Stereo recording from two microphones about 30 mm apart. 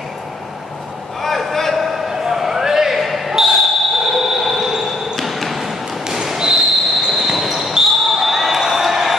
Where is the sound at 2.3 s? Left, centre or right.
Centre.